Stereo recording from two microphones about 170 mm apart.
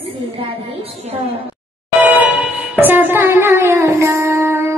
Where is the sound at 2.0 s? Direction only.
10° right (ahead or behind).